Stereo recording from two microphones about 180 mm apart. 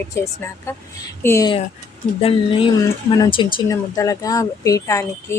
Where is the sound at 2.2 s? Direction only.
30° left (ahead or behind).